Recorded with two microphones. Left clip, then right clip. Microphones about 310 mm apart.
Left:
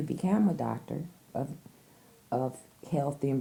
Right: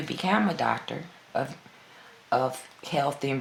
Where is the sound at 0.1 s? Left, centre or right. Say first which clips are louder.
Right 6 dB; left.